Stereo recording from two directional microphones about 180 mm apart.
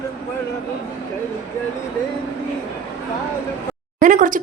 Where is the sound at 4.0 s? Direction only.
45° right (ahead or behind).